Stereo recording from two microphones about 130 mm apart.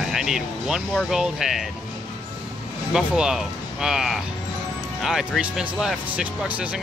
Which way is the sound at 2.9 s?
5° right (ahead or behind).